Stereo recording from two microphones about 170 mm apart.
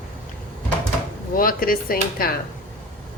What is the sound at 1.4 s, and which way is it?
Speech, 55° left (ahead or behind).